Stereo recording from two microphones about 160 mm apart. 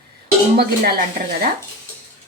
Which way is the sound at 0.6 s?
75° right (ahead or behind).